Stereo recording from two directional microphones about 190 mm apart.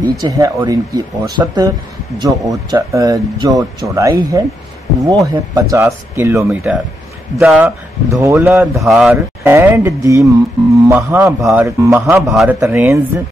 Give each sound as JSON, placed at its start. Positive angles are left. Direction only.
{"t": 0.2, "sound": "speech", "side_deg": -20}
{"t": 7.3, "sound": "speech", "side_deg": -5}
{"t": 8.8, "sound": "speech", "side_deg": 0}
{"t": 9.4, "sound": "speech", "side_deg": -10}
{"t": 12.3, "sound": "speech", "side_deg": 0}
{"t": 12.5, "sound": "speech", "side_deg": -15}